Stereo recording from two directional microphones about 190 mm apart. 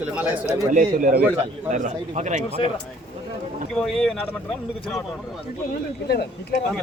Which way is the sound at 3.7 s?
Centre (ahead or behind).